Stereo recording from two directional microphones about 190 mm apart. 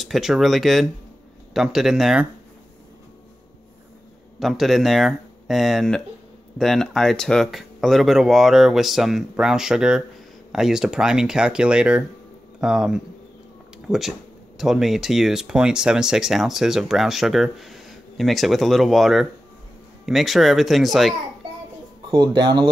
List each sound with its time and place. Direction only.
0.0 s speech: centre (ahead or behind)
4.4 s speech: centre (ahead or behind)
22.1 s speech: 25° right (ahead or behind)